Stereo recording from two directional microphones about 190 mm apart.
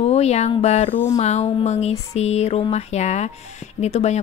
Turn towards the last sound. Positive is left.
turn(degrees=35)  # may be behind; listen again after turning